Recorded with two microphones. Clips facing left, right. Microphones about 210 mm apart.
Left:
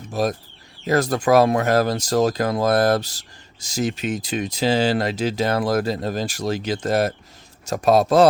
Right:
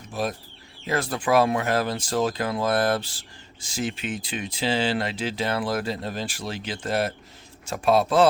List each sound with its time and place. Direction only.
0.1 s speech: 40° left (ahead or behind)